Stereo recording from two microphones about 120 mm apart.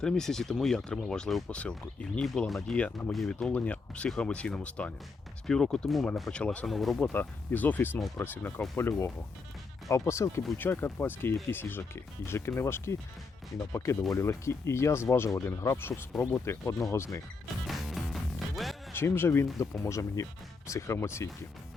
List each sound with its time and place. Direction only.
0.0 s speech: 5° left (ahead or behind)
7.0 s speech: 15° left (ahead or behind)
14.1 s speech: 25° left (ahead or behind)
17.7 s music: centre (ahead or behind)
18.9 s speech: 20° left (ahead or behind)